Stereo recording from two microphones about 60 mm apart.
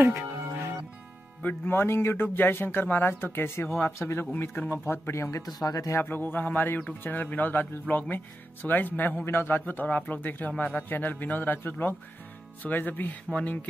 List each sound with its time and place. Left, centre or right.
0.0 s music: right
1.7 s speech: left
5.4 s speech: left
6.0 s speech: left
13.3 s speech: centre